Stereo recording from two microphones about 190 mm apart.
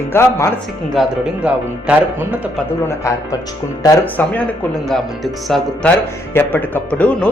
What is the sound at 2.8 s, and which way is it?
Speech, 15° left (ahead or behind).